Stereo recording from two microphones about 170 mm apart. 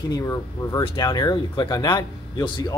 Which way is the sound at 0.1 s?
20° left (ahead or behind).